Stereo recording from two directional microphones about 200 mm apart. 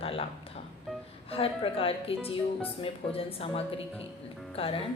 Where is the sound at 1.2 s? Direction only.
30° left (ahead or behind).